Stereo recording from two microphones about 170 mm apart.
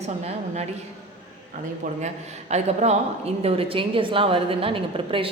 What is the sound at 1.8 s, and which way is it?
A man's voice, 50° right (ahead or behind).